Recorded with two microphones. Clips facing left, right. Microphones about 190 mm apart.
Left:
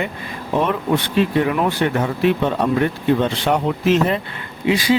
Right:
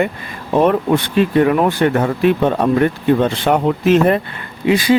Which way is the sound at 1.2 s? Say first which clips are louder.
Right 5 dB; 45° right (ahead or behind).